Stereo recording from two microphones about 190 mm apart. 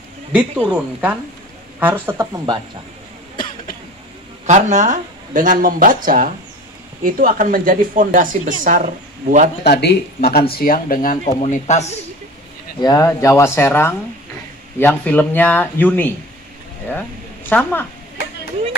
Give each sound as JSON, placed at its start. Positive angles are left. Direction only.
{"t": 0.3, "sound": "speech", "side_deg": -5}
{"t": 4.5, "sound": "a woman's voice", "side_deg": -40}
{"t": 9.6, "sound": "speech", "side_deg": 60}
{"t": 12.8, "sound": "speech", "side_deg": 15}
{"t": 17.5, "sound": "speech", "side_deg": 10}